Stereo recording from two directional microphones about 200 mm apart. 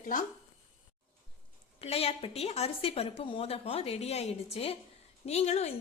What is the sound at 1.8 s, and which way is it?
A woman's voice, 30° left (ahead or behind).